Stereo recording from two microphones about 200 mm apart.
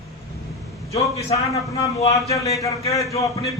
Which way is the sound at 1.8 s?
15° left (ahead or behind).